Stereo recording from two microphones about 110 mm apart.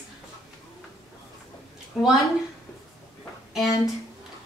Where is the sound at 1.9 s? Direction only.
5° right (ahead or behind).